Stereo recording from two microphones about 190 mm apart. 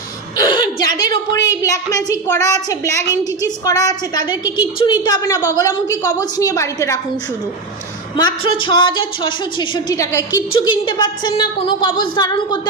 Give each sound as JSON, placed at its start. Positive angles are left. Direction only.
{"t": 0.3, "sound": "a woman's voice", "side_deg": 20}
{"t": 8.1, "sound": "a woman's voice", "side_deg": 25}